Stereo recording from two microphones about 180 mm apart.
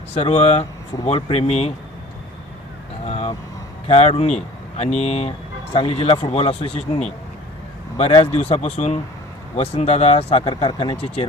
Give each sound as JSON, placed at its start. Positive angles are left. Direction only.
{"t": 0.1, "sound": "speech", "side_deg": 35}
{"t": 3.1, "sound": "vehicle", "side_deg": 35}
{"t": 3.8, "sound": "speech", "side_deg": 35}